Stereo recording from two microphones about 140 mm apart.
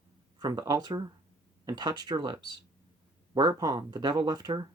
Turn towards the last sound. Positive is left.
turn(degrees=-30)  # may be behind; listen again after turning